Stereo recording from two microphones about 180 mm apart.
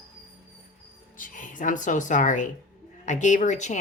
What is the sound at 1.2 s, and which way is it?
A woman's voice, 45° left (ahead or behind).